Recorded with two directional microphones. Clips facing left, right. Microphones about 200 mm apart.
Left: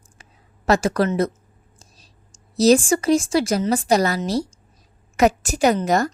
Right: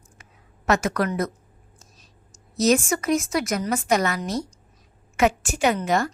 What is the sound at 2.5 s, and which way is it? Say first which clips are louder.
A woman's voice: left 5 dB; 35° left (ahead or behind).